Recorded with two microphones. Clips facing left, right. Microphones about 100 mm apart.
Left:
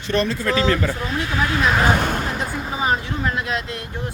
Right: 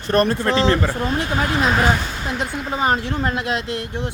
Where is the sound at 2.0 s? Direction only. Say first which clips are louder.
Left 6 dB; 55° left (ahead or behind).